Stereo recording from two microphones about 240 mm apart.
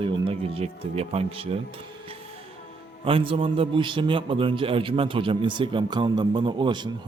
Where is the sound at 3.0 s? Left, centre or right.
Right.